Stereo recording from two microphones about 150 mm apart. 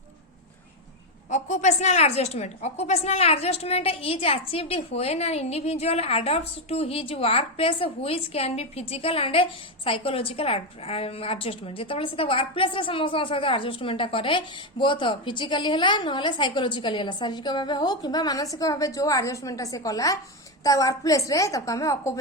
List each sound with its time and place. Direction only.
1.3 s a woman's voice: 50° left (ahead or behind); by 22.2 s 20° left (ahead or behind)